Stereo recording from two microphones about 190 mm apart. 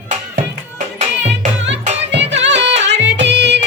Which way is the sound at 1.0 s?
35° right (ahead or behind).